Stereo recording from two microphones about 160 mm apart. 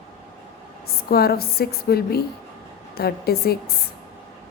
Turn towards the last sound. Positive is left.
turn(degrees=80)